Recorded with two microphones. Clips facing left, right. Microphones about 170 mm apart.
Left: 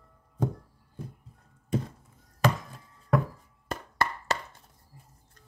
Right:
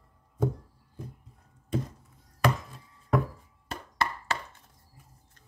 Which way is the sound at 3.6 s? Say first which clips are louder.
Left 1 dB; 45° left (ahead or behind).